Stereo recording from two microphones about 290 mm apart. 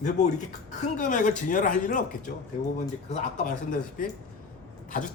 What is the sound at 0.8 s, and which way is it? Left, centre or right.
A man's voice, left.